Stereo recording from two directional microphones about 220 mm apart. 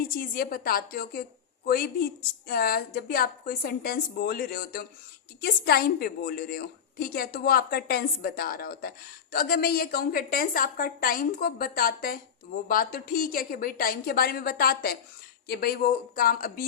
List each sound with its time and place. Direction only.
0.1 s a woman's voice: 40° left (ahead or behind)